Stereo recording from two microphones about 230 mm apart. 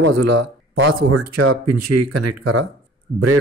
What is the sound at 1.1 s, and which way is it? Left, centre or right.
Speech, right.